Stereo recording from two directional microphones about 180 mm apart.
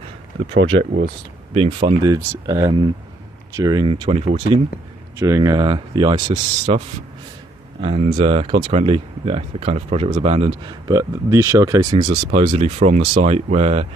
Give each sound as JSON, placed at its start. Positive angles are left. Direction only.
{"t": 0.7, "sound": "speech", "side_deg": -65}
{"t": 1.5, "sound": "speech", "side_deg": -30}
{"t": 5.2, "sound": "speech", "side_deg": -20}
{"t": 7.8, "sound": "speech", "side_deg": -30}
{"t": 10.9, "sound": "speech", "side_deg": -20}